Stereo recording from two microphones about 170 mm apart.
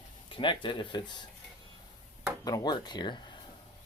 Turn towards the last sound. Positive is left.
turn(degrees=25)  # may be behind; listen again after turning